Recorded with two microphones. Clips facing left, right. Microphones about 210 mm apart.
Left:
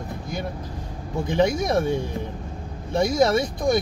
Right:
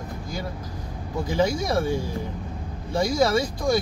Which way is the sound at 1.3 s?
20° left (ahead or behind).